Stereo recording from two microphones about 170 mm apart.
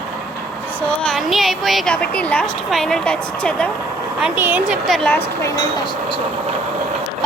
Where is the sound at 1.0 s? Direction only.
Centre (ahead or behind).